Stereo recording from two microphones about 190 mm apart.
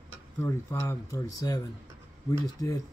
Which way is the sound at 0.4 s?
15° left (ahead or behind).